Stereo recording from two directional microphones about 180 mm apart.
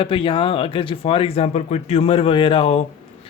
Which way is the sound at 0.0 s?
30° left (ahead or behind).